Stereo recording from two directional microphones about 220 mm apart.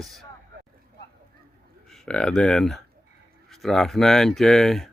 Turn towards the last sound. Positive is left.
turn(degrees=0)  # may be behind; listen again after turning